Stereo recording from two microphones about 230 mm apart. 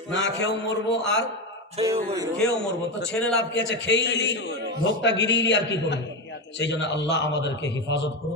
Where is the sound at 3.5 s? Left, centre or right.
Left.